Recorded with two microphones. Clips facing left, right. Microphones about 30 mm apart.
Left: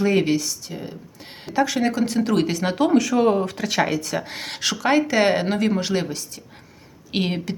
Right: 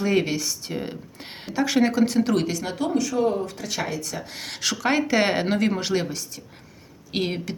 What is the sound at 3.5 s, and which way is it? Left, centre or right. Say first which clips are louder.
Speech: left 7 dB; left.